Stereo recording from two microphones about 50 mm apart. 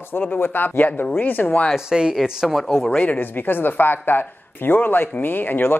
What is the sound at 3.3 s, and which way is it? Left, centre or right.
Speech, left.